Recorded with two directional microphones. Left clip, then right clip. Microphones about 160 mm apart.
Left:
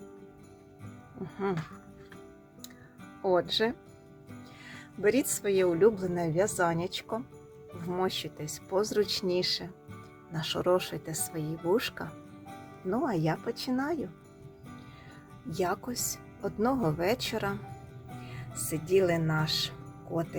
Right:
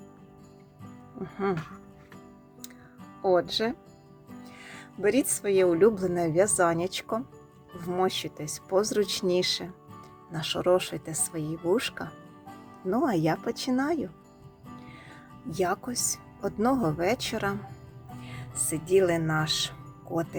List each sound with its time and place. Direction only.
1.2 s speech: 15° right (ahead or behind)
3.2 s a woman's voice: 10° right (ahead or behind)
10.3 s a woman's voice: 10° right (ahead or behind)
15.4 s speech: 15° right (ahead or behind)